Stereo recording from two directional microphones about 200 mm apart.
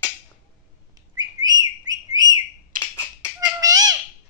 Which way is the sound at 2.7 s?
45° right (ahead or behind).